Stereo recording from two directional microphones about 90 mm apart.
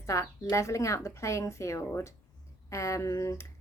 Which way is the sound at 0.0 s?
35° left (ahead or behind).